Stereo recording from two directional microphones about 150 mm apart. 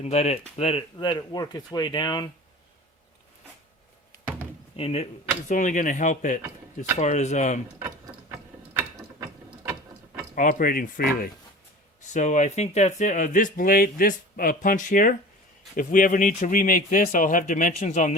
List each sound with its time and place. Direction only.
0.0 s speech: 45° left (ahead or behind); by 2.3 s 30° left (ahead or behind)
4.8 s speech: 40° left (ahead or behind)
5.5 s speech: 55° left (ahead or behind)
10.3 s speech: 60° left (ahead or behind)
12.1 s speech: 50° left (ahead or behind)